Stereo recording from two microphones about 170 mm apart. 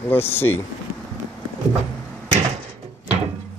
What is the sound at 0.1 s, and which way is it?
Speech, 15° left (ahead or behind).